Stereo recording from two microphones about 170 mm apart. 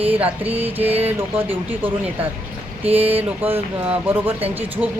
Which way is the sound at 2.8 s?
35° right (ahead or behind).